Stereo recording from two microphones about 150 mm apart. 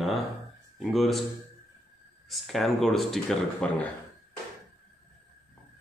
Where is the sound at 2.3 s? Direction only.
Centre (ahead or behind).